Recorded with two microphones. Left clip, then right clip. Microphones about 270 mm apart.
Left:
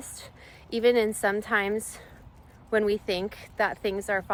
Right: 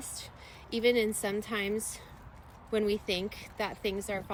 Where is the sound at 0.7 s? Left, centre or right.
Centre.